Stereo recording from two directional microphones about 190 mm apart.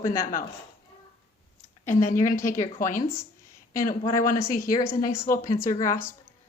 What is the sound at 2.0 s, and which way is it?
Speech, 45° left (ahead or behind).